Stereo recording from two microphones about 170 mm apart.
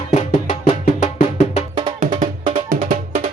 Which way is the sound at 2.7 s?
55° right (ahead or behind).